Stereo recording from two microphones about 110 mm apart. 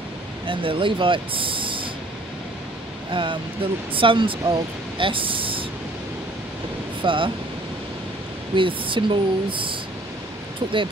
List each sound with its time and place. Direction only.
0.5 s speech: 50° right (ahead or behind)
3.1 s speech: 50° right (ahead or behind)
7.0 s speech: 50° right (ahead or behind)
8.5 s speech: 50° right (ahead or behind)